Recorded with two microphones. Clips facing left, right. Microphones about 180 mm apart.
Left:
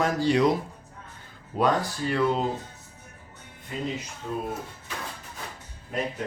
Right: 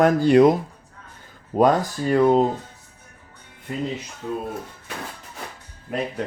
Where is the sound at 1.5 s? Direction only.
50° right (ahead or behind).